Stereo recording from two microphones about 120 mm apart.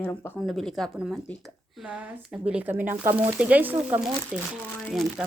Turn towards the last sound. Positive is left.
turn(degrees=5)  # may be behind; listen again after turning